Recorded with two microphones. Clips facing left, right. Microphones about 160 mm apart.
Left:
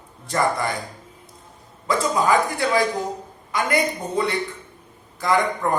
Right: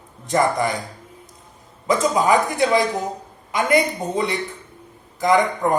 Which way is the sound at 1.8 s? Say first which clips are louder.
Right 2 dB; 20° right (ahead or behind).